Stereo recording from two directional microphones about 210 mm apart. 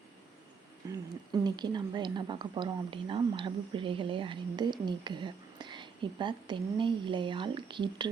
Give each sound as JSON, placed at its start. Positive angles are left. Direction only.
{"t": 1.3, "sound": "speech", "side_deg": -20}